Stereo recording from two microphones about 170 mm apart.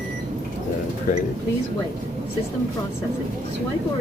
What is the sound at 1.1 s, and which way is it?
Speech, 50° left (ahead or behind).